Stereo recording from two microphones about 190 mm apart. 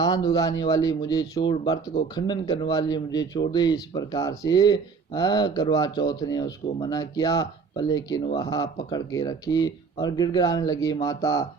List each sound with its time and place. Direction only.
0.0 s speech: 20° left (ahead or behind)